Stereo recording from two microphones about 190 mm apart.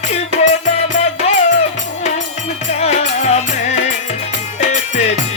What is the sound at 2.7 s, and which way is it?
Music, 35° left (ahead or behind).